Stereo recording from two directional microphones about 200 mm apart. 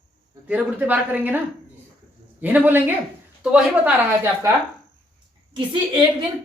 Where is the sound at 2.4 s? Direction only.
10° right (ahead or behind).